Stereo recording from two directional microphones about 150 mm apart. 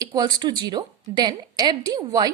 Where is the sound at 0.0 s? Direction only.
25° right (ahead or behind).